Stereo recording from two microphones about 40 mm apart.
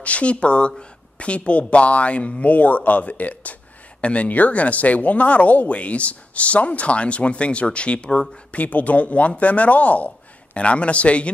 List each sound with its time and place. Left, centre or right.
0.0 s speech: left